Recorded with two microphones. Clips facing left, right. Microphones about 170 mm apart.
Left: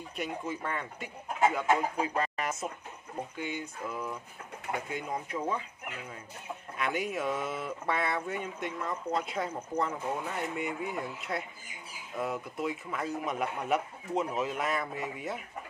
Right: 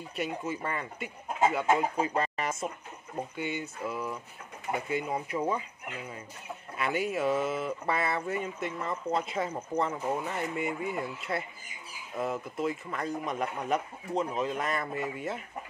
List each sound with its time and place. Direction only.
0.1 s speech: 5° right (ahead or behind)
3.3 s a sound: 5° right (ahead or behind)
6.8 s speech: centre (ahead or behind)